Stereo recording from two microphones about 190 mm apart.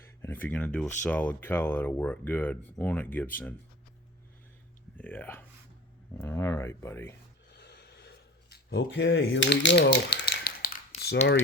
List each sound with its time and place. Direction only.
0.0 s speech: 10° left (ahead or behind)
4.9 s speech: 10° left (ahead or behind)
7.5 s a sound: 60° left (ahead or behind)
8.8 s speech: 80° left; by 11.2 s 55° left (ahead or behind)